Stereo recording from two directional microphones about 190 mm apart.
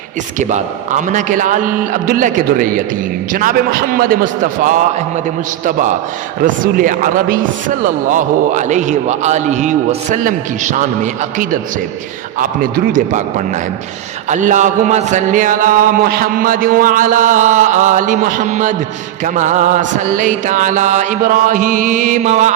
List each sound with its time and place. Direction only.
0.3 s speech: 40° right (ahead or behind)
6.4 s a man's voice: 45° right (ahead or behind)